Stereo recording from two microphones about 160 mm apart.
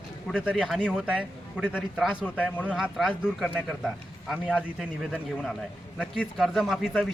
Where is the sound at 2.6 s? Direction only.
5° right (ahead or behind).